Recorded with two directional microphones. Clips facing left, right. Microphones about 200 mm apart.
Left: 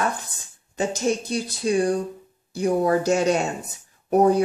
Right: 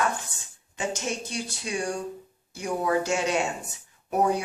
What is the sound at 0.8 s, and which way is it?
Speech, 35° left (ahead or behind).